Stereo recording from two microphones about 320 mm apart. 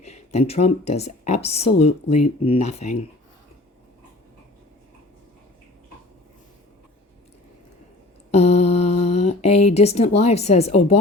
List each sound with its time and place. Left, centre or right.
0.0 s speech: centre
8.3 s a sound: centre
10.2 s speech: centre